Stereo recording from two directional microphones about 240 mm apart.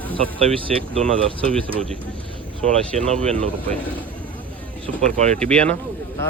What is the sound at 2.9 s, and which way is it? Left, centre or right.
Speech, right.